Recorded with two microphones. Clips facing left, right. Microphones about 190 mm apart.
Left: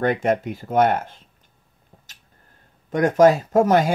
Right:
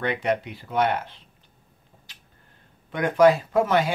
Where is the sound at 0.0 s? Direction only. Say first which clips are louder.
Left 5 dB; 45° left (ahead or behind).